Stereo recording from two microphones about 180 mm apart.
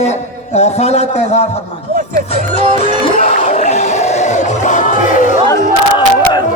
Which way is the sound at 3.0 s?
35° left (ahead or behind).